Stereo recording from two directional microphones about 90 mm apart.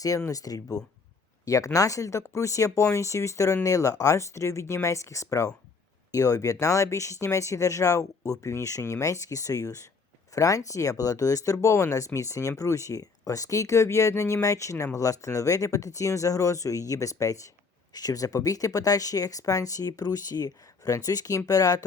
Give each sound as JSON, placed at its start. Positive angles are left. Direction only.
{"t": 0.3, "sound": "speech", "side_deg": 40}